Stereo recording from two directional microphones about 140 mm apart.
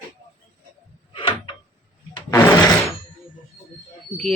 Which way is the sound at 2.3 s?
15° left (ahead or behind).